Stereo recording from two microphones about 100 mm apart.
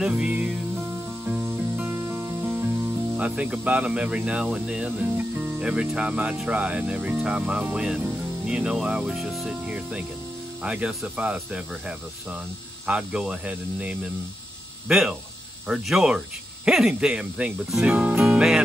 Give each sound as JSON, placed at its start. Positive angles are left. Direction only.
{"t": 0.0, "sound": "music", "side_deg": -10}
{"t": 3.2, "sound": "speech", "side_deg": -10}
{"t": 12.8, "sound": "speech", "side_deg": -10}